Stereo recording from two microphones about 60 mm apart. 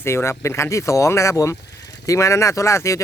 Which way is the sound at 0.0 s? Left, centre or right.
Left.